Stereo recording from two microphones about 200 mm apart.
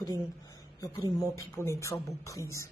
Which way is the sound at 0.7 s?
15° left (ahead or behind).